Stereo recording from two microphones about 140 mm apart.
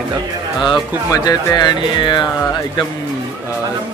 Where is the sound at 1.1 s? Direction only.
25° left (ahead or behind).